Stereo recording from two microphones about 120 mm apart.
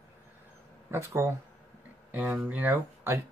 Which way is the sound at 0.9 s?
20° right (ahead or behind).